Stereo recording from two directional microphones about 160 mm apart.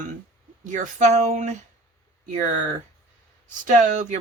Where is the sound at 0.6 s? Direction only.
50° right (ahead or behind).